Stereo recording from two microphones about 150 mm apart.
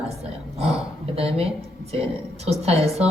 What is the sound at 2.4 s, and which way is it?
Speech, 45° right (ahead or behind).